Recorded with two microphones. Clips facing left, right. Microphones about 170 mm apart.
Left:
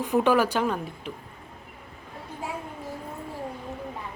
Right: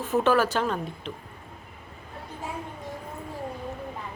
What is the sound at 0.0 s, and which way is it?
Speech, 15° left (ahead or behind).